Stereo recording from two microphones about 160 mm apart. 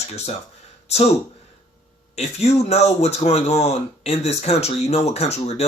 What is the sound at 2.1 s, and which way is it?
Speech, 40° left (ahead or behind).